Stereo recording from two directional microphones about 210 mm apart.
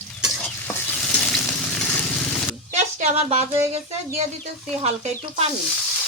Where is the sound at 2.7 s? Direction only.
30° right (ahead or behind).